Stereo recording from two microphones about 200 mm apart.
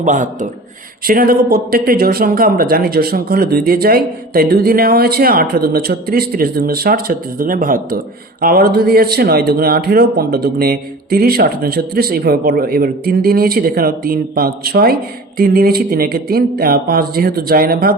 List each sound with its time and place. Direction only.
0.0 s speech: 40° right (ahead or behind)